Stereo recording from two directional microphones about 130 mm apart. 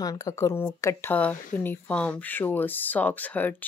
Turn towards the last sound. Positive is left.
turn(degrees=15)  # may be behind; listen again after turning